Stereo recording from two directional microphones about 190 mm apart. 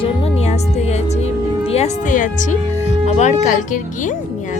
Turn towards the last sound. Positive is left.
turn(degrees=40)  # may be behind; listen again after turning